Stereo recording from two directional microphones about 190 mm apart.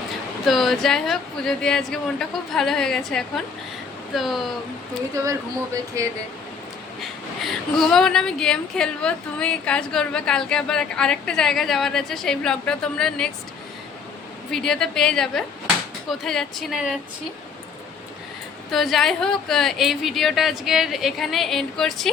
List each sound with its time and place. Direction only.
0.4 s speech: centre (ahead or behind)
5.7 s speech: 15° right (ahead or behind)
7.0 s speech: centre (ahead or behind)
14.5 s speech: 5° left (ahead or behind)
18.7 s speech: centre (ahead or behind)